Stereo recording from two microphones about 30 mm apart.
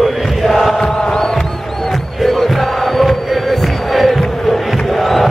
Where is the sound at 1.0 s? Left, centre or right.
Left.